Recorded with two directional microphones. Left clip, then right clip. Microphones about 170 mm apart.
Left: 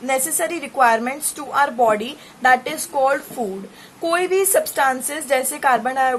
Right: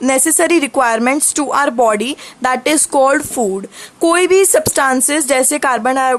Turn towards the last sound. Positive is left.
turn(degrees=-45)  # may be behind; listen again after turning